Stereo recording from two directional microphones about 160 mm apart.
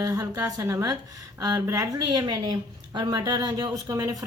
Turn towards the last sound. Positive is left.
turn(degrees=-20)  # may be behind; listen again after turning